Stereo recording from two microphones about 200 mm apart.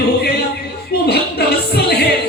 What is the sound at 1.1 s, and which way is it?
Music, 55° left (ahead or behind).